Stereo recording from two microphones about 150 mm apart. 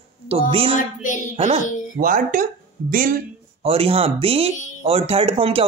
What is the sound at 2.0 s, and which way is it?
Speech, 65° right (ahead or behind).